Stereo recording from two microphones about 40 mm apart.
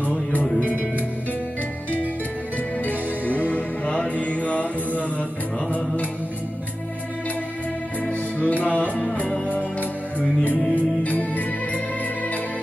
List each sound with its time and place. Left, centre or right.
0.0 s music: left
2.8 s music: left
3.9 s mantra: left
8.1 s music: left